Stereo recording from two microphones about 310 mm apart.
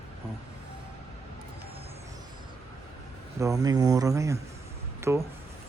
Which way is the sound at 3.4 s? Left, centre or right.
Centre.